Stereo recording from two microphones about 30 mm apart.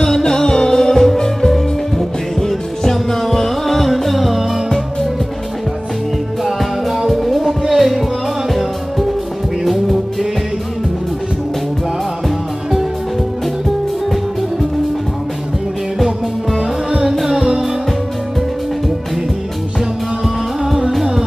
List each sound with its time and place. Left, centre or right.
0.2 s music: centre
6.4 s music: centre
17.1 s music: centre